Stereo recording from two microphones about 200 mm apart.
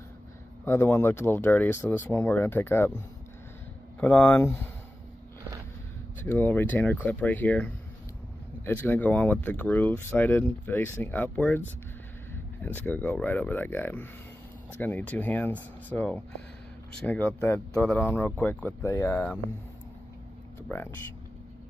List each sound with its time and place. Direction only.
0.7 s speech: 10° left (ahead or behind)
4.0 s speech: 10° left (ahead or behind)
6.2 s speech: 10° left (ahead or behind)
12.6 s speech: 10° left (ahead or behind)
20.6 s speech: 10° left (ahead or behind)